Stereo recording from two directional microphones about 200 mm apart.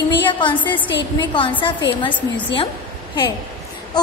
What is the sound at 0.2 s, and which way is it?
A woman's voice, 25° left (ahead or behind).